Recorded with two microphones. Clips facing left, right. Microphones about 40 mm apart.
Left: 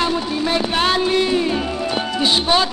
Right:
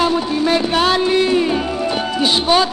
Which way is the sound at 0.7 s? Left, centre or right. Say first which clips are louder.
Right 1 dB; centre.